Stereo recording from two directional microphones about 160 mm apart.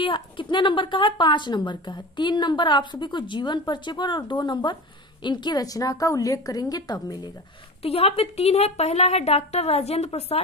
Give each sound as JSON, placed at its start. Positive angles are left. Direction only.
{"t": 0.0, "sound": "a woman's voice", "side_deg": 30}
{"t": 7.8, "sound": "a woman's voice", "side_deg": 40}